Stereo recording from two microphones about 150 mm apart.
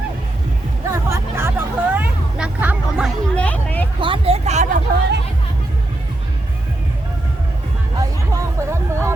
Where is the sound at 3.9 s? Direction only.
35° right (ahead or behind).